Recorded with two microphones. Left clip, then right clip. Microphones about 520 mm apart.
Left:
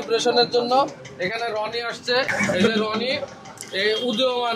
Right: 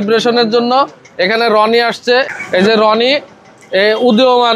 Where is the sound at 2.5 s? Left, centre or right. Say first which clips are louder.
Right 12 dB; right.